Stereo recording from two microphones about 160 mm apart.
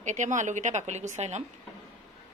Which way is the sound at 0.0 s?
50° right (ahead or behind).